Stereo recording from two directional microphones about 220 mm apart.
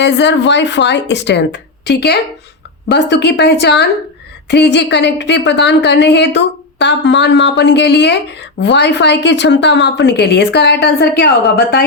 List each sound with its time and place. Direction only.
0.0 s speech: 50° left (ahead or behind)